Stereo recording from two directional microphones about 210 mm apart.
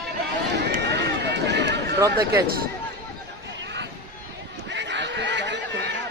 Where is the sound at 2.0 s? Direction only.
15° right (ahead or behind).